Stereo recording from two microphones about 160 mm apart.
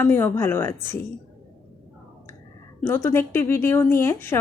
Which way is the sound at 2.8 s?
15° left (ahead or behind).